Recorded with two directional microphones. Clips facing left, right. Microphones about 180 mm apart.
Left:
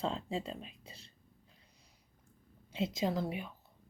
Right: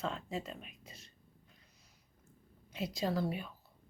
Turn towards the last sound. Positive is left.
turn(degrees=15)  # may be behind; listen again after turning